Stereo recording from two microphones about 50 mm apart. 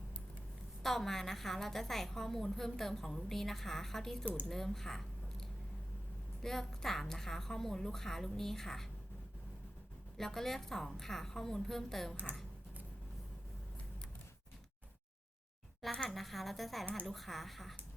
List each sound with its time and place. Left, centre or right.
0.8 s a woman's voice: centre
10.2 s a woman's voice: centre
16.0 s a woman's voice: centre